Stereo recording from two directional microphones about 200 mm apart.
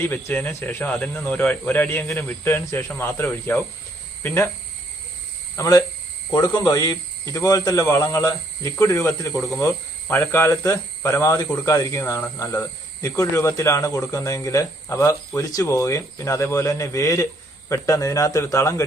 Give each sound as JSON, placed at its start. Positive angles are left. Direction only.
{"t": 0.0, "sound": "speech", "side_deg": 10}
{"t": 5.5, "sound": "speech", "side_deg": 15}